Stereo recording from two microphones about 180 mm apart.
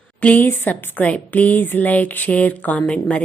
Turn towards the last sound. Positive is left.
turn(degrees=5)  # may be behind; listen again after turning